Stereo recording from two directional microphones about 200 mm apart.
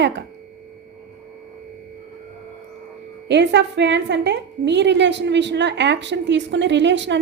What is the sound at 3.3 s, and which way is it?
A woman's voice, 60° right (ahead or behind).